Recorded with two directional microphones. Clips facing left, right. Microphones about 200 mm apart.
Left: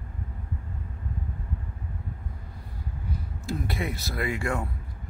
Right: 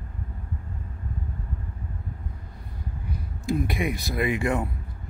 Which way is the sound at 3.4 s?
15° right (ahead or behind).